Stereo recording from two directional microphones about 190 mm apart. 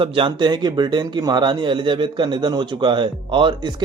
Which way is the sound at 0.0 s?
25° right (ahead or behind).